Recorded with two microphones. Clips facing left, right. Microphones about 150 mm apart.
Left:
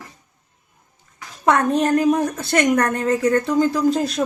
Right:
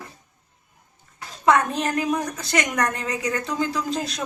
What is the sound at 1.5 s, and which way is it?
A woman's voice, 45° left (ahead or behind).